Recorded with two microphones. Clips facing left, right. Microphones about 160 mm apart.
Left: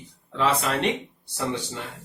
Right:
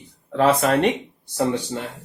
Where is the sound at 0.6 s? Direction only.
50° right (ahead or behind).